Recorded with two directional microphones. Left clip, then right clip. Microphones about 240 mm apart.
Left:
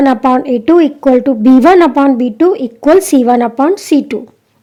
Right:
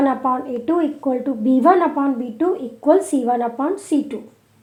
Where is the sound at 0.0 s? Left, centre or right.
Left.